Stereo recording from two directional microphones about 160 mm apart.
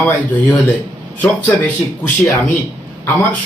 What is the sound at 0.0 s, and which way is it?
Speech, 10° left (ahead or behind).